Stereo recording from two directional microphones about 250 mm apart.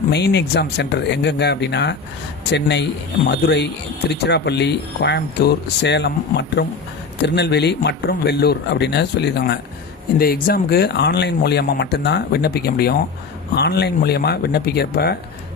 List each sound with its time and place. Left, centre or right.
0.1 s speech: left